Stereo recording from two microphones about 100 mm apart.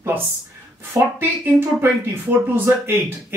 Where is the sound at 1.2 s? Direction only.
20° right (ahead or behind).